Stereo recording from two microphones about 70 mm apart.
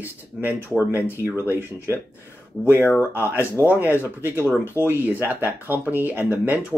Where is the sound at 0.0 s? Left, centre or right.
Right.